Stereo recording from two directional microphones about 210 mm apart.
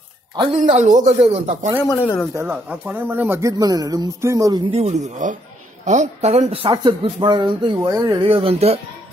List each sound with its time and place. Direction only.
0.4 s speech: 30° right (ahead or behind)
1.9 s speech: 10° left (ahead or behind)
2.3 s speech: 10° right (ahead or behind); by 8.7 s 30° right (ahead or behind)